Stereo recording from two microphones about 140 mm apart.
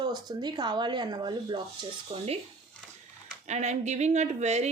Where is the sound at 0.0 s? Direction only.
30° right (ahead or behind).